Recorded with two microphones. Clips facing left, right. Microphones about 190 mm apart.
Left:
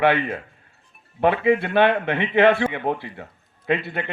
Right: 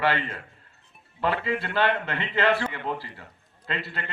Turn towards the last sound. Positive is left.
turn(degrees=60)  # may be behind; listen again after turning